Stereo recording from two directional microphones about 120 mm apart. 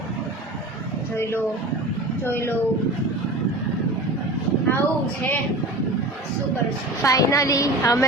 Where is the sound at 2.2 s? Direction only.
20° left (ahead or behind).